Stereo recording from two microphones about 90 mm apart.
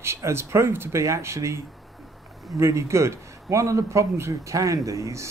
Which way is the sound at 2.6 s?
35° right (ahead or behind).